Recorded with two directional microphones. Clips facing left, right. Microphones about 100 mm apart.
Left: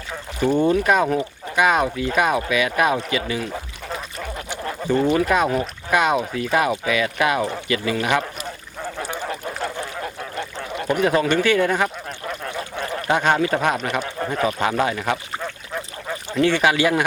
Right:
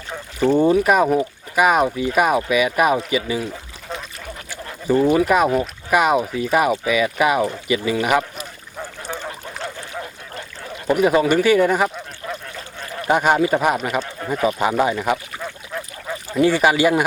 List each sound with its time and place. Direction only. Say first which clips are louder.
0.5 s speech: right 2 dB; 10° right (ahead or behind)
4.9 s speech: right 3 dB; 10° right (ahead or behind)
10.8 s speech: right 3 dB; 10° right (ahead or behind)
12.5 s duck: left 6 dB; 70° left (ahead or behind)
13.1 s speech: right 3 dB; 10° right (ahead or behind)
16.3 s speech: right 2 dB; 10° right (ahead or behind)